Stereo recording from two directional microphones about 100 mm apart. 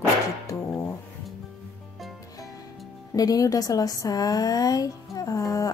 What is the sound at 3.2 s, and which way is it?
A woman's voice, 35° left (ahead or behind).